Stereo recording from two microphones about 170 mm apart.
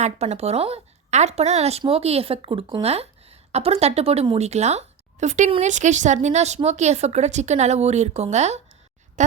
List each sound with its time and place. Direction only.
0.0 s speech: 40° right (ahead or behind)